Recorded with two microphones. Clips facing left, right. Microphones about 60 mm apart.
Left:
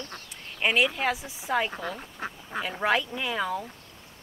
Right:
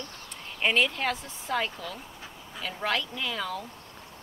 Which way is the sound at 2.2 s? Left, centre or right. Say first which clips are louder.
Left 9 dB; left.